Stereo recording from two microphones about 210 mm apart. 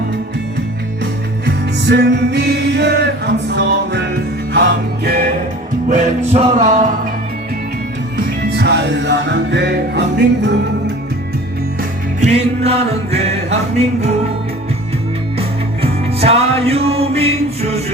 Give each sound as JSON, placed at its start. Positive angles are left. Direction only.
{"t": 1.5, "sound": "music", "side_deg": -55}
{"t": 5.9, "sound": "music", "side_deg": -35}
{"t": 8.5, "sound": "music", "side_deg": -55}
{"t": 11.8, "sound": "music", "side_deg": -35}
{"t": 15.4, "sound": "music", "side_deg": -30}